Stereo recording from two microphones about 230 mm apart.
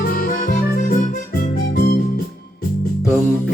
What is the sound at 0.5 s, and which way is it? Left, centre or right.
Music, left.